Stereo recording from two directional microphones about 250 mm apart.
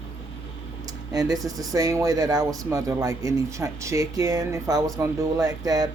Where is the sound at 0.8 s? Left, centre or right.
Centre.